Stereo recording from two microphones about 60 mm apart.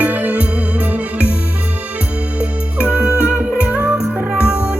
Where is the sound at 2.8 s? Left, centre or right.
Right.